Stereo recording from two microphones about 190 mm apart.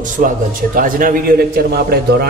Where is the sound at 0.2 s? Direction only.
45° right (ahead or behind).